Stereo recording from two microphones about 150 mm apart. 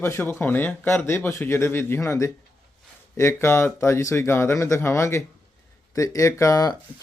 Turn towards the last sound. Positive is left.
turn(degrees=20)  # may be behind; listen again after turning